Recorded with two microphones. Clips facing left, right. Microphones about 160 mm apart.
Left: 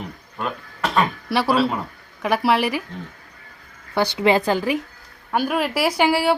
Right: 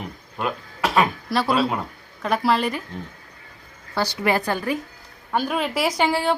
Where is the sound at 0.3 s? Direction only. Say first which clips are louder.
Right 1 dB; 5° right (ahead or behind).